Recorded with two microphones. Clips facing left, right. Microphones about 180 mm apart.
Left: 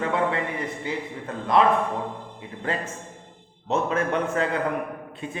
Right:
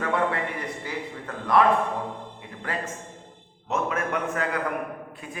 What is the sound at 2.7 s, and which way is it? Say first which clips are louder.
A man's voice: left 3 dB; 25° left (ahead or behind).